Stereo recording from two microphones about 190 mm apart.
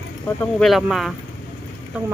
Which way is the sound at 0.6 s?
Centre (ahead or behind).